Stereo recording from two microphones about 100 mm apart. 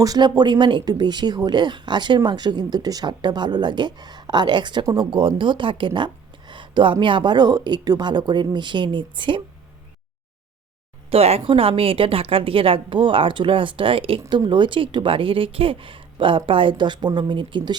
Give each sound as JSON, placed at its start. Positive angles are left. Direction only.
{"t": 0.0, "sound": "speech", "side_deg": -40}
{"t": 11.1, "sound": "speech", "side_deg": -90}
{"t": 14.3, "sound": "speech", "side_deg": -50}